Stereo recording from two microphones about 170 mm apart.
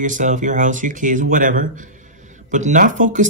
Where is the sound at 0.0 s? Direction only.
45° right (ahead or behind).